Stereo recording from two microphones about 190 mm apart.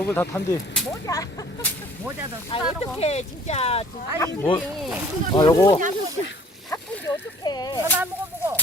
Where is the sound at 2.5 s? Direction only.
30° left (ahead or behind).